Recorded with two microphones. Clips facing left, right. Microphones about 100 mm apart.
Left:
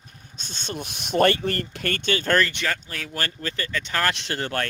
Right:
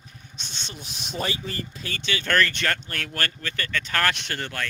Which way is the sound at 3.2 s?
25° left (ahead or behind).